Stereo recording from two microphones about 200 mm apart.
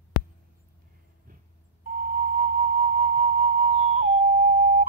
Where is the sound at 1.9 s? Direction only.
45° right (ahead or behind).